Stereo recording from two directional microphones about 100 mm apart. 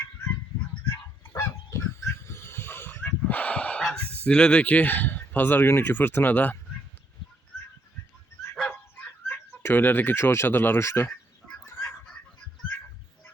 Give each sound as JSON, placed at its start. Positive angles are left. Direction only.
{"t": 0.9, "sound": "goose", "side_deg": 25}
{"t": 9.2, "sound": "speech", "side_deg": 20}